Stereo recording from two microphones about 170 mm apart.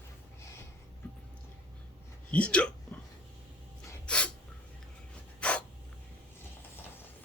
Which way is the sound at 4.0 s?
5° left (ahead or behind).